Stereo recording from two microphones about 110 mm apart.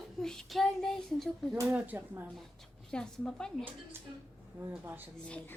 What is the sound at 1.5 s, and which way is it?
Speech, 15° right (ahead or behind).